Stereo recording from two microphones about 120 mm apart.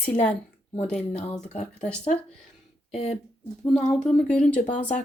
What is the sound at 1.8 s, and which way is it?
Speech, 10° left (ahead or behind).